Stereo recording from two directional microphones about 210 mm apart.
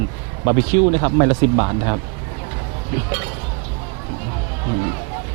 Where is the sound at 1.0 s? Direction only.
20° right (ahead or behind).